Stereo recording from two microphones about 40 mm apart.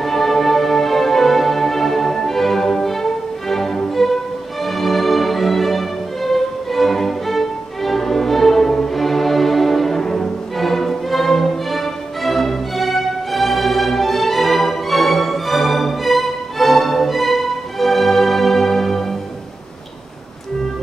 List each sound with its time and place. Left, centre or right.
0.0 s music: centre